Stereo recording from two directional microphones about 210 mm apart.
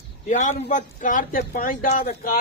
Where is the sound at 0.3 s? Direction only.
35° left (ahead or behind).